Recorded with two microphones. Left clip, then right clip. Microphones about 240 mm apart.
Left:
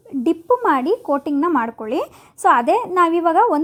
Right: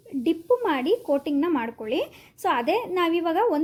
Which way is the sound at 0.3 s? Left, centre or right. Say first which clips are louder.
Left 6 dB; left.